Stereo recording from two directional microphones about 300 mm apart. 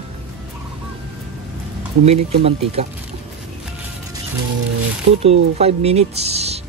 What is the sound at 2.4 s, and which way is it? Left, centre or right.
Speech, centre.